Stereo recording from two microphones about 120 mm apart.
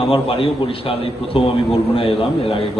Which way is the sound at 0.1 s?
50° left (ahead or behind).